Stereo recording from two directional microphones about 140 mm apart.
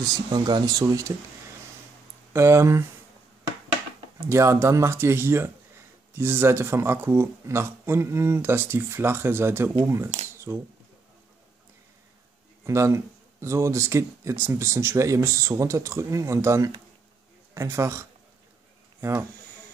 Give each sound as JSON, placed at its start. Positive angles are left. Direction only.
{"t": 0.0, "sound": "speech", "side_deg": -30}
{"t": 2.3, "sound": "speech", "side_deg": -20}
{"t": 4.3, "sound": "speech", "side_deg": -20}
{"t": 12.6, "sound": "speech", "side_deg": -20}